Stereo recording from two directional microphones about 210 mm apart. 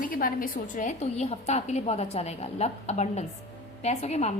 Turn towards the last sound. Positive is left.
turn(degrees=30)  # may be behind; listen again after turning